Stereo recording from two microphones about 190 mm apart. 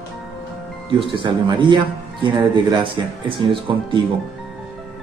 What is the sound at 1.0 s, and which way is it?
Speech, 25° right (ahead or behind).